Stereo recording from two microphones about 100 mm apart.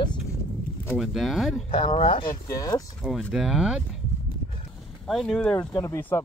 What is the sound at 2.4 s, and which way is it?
Speech, 35° left (ahead or behind).